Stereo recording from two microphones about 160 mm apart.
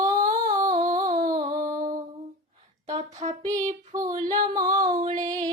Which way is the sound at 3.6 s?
50° right (ahead or behind).